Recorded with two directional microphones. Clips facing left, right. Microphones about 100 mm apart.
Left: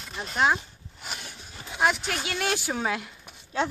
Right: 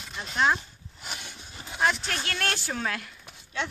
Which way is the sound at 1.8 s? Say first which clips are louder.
Left 2 dB; 10° left (ahead or behind).